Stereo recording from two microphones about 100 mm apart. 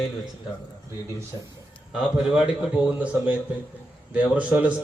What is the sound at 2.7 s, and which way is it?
A man's voice, 15° right (ahead or behind).